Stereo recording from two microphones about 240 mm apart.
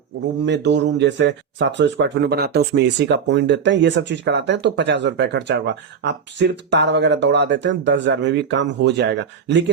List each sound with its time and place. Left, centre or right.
0.4 s speech: right